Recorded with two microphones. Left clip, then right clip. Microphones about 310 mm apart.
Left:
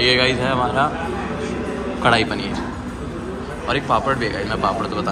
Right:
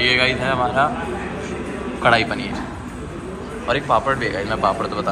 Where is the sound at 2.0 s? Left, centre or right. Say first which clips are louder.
Right 1 dB; centre.